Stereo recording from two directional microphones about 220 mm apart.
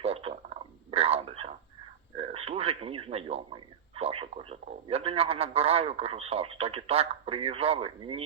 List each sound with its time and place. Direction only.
0.0 s radio: 25° right (ahead or behind)
2.1 s speech: 25° right (ahead or behind)